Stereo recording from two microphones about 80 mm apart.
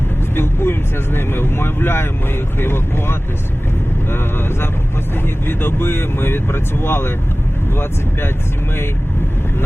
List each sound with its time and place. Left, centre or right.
0.3 s speech: left
5.5 s speech: left